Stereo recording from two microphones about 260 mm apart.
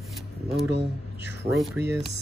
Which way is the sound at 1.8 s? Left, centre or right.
Right.